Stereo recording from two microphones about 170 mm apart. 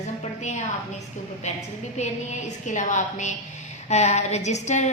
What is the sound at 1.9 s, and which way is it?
A woman's voice, 45° left (ahead or behind).